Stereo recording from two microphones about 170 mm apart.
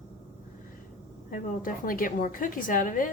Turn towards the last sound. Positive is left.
turn(degrees=50)  # may be behind; listen again after turning